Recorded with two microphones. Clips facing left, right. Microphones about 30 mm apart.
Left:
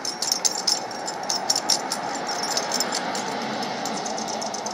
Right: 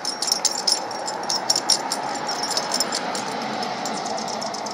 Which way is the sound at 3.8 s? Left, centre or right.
Right.